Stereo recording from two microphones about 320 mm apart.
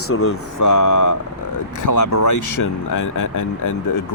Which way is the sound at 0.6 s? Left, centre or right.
Left.